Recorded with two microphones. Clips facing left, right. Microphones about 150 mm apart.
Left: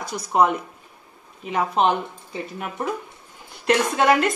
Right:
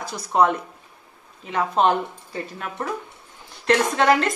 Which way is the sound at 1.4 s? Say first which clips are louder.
Even; 15° left (ahead or behind).